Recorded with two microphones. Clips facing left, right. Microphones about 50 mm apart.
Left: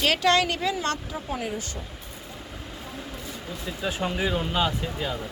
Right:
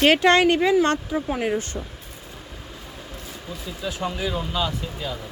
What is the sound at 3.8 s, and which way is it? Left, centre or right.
Speech, left.